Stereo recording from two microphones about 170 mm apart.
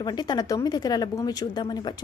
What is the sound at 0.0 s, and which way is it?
Speech, 25° left (ahead or behind).